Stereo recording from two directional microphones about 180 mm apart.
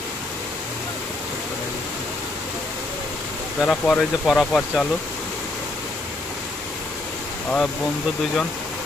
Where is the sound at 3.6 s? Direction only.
5° left (ahead or behind).